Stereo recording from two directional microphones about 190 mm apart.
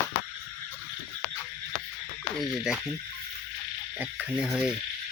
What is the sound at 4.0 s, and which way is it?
Speech, centre (ahead or behind).